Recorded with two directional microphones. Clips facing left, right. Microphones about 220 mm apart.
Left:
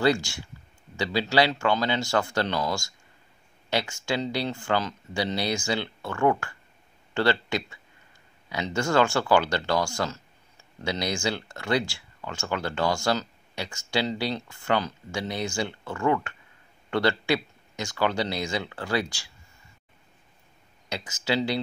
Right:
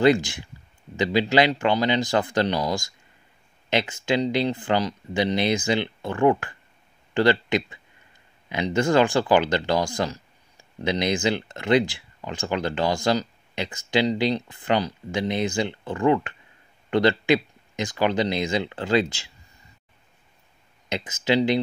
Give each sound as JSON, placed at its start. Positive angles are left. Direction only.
{"t": 0.0, "sound": "speech", "side_deg": -20}
{"t": 20.9, "sound": "speech", "side_deg": -20}